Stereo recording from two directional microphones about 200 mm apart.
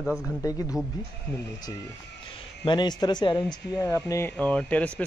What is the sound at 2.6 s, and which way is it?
Speech, 20° left (ahead or behind).